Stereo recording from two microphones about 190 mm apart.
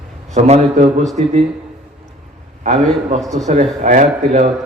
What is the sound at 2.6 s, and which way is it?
A man's voice, 40° right (ahead or behind).